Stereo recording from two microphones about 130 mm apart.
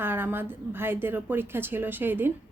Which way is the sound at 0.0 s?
15° right (ahead or behind).